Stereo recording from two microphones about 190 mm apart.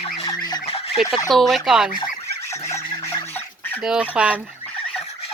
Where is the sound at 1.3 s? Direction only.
Centre (ahead or behind).